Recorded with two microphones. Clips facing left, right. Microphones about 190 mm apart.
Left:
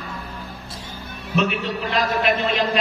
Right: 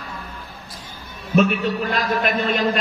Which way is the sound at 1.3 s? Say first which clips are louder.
Right 4 dB; 45° right (ahead or behind).